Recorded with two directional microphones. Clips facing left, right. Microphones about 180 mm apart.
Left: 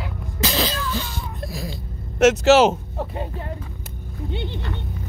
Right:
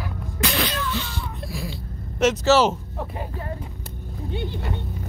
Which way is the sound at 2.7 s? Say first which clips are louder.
Left 3 dB; 25° left (ahead or behind).